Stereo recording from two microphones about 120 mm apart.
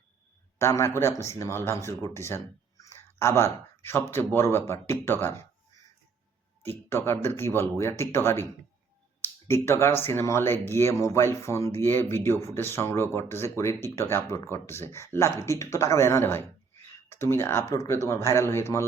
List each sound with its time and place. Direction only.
0.6 s speech: 20° left (ahead or behind)
6.9 s speech: 20° left (ahead or behind)